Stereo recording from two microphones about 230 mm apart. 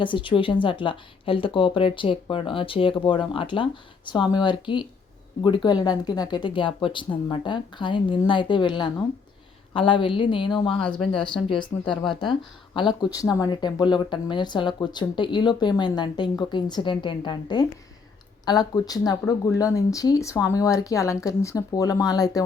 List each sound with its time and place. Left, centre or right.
0.0 s speech: left